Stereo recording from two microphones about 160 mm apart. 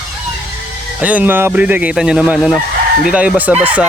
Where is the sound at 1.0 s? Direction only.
10° right (ahead or behind).